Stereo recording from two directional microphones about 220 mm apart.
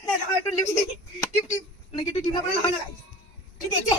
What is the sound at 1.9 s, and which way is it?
Speech, 25° left (ahead or behind).